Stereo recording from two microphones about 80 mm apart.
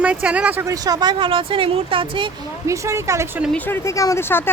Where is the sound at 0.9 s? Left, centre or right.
Right.